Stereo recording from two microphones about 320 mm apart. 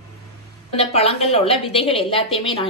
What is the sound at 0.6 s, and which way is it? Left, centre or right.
A woman's voice, centre.